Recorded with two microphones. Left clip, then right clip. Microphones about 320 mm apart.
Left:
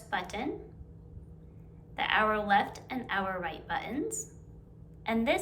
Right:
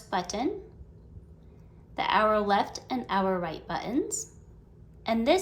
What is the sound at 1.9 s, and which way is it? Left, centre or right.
A woman's voice, centre.